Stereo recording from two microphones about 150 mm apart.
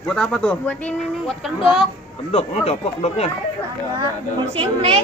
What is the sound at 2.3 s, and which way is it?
Speech, 40° left (ahead or behind).